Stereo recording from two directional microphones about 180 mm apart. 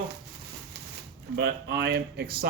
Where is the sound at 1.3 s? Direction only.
60° right (ahead or behind).